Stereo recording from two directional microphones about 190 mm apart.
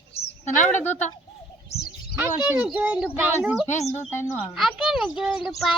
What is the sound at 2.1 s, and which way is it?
A child's voice, 10° right (ahead or behind).